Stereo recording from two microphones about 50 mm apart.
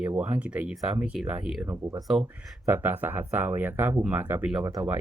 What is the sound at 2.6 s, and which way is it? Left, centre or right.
Speech, right.